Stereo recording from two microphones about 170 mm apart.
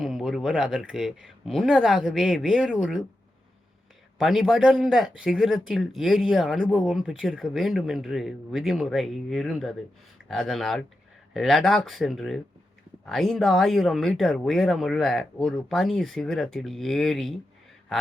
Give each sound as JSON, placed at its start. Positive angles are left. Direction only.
{"t": 0.0, "sound": "speech", "side_deg": 0}
{"t": 4.2, "sound": "speech", "side_deg": 0}